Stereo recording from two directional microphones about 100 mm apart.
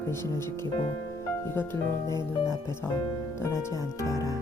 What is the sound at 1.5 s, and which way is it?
Speech, 25° left (ahead or behind).